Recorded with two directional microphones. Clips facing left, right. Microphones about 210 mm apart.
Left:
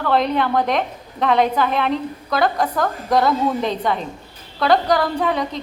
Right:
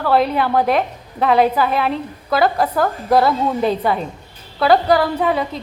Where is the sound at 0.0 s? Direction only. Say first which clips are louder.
Right 2 dB; 5° right (ahead or behind).